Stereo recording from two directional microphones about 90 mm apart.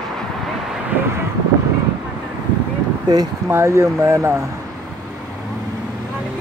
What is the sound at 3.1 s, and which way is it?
Speech, 45° right (ahead or behind).